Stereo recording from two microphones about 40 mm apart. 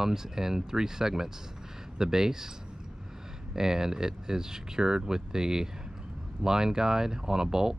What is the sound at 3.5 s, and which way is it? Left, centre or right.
Speech, centre.